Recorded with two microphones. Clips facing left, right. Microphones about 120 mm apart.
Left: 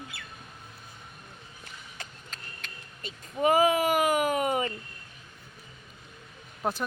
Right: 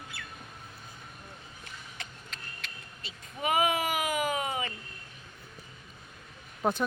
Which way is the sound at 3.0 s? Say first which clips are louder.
Left 8 dB; 35° left (ahead or behind).